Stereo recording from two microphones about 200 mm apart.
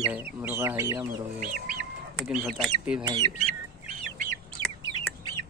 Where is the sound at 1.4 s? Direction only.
45° right (ahead or behind).